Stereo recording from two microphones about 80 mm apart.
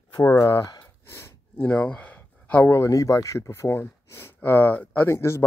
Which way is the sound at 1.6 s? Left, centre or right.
Centre.